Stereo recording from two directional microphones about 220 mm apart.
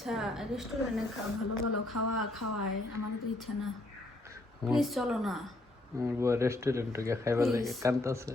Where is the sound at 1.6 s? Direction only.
80° left.